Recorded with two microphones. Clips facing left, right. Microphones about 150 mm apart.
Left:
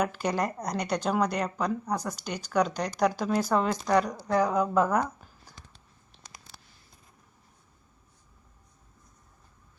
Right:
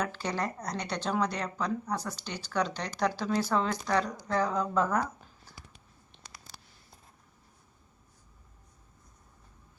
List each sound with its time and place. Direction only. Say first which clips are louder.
0.0 s a woman's voice: left 4 dB; 15° left (ahead or behind)